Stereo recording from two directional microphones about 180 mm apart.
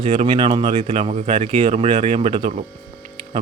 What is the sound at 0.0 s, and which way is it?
Speech, 30° right (ahead or behind).